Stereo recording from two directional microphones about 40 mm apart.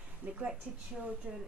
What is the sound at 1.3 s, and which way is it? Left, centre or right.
Speech, centre.